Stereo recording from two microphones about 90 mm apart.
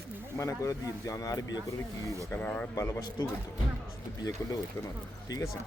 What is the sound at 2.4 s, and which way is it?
Speech, 15° left (ahead or behind).